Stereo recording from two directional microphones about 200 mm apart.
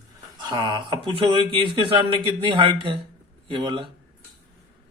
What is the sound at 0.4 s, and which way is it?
Speech, 20° right (ahead or behind).